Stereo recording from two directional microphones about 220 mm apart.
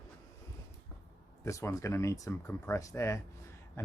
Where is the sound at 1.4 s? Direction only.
15° left (ahead or behind).